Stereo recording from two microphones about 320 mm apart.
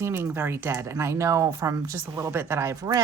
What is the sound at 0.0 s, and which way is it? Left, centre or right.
Speech, centre.